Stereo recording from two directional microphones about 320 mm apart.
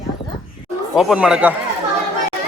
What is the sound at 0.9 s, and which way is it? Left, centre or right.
Speech, centre.